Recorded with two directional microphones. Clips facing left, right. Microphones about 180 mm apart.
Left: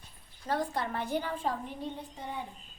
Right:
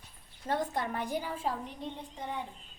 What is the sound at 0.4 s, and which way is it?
A woman's voice, 25° right (ahead or behind).